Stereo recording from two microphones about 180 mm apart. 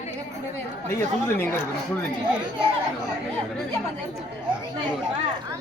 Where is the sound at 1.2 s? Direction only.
10° left (ahead or behind).